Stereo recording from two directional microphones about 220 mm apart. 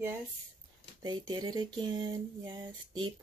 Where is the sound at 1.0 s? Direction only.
20° right (ahead or behind).